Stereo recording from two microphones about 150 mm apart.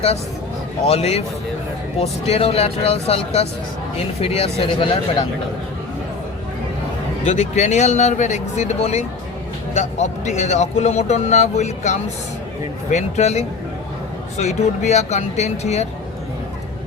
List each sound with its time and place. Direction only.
0.9 s speech: 45° left (ahead or behind)
7.3 s speech: 50° left (ahead or behind)